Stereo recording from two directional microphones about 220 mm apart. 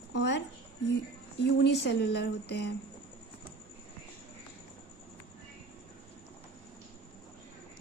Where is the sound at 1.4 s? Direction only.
50° left (ahead or behind).